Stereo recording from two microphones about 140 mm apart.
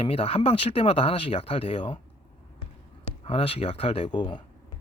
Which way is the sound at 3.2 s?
45° left (ahead or behind).